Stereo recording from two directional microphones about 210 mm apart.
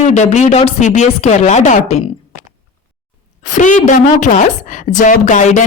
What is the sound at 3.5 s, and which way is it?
Speech, 35° left (ahead or behind).